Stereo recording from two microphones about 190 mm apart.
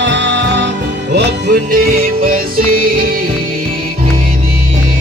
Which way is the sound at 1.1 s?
55° right (ahead or behind).